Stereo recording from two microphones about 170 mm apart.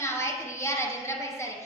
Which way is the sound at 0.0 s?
15° left (ahead or behind).